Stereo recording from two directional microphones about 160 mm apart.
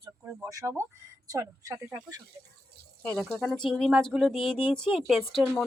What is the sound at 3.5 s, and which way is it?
Speech, centre (ahead or behind).